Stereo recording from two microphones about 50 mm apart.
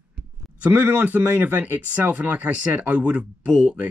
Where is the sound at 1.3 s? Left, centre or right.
Right.